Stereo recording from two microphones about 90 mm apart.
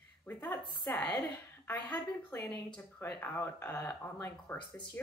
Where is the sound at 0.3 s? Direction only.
20° left (ahead or behind).